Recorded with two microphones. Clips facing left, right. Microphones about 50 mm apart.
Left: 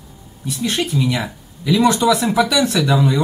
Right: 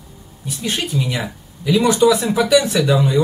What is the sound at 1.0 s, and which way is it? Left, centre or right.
Speech, centre.